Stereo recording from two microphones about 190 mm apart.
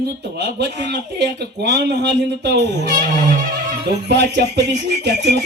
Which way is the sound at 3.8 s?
65° right (ahead or behind).